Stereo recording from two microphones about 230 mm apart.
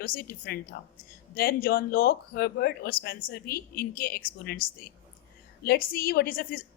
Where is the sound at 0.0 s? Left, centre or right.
Left.